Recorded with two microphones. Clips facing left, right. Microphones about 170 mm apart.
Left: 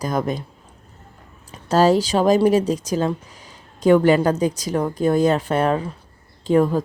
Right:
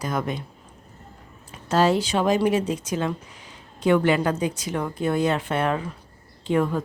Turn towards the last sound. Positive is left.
turn(degrees=35)  # may be behind; listen again after turning